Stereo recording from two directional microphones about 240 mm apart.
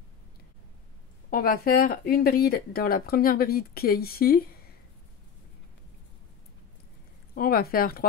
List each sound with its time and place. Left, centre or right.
1.3 s speech: left
7.3 s speech: left